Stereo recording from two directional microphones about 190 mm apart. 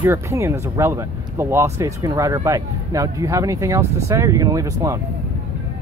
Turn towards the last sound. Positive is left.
turn(degrees=-15)  # may be behind; listen again after turning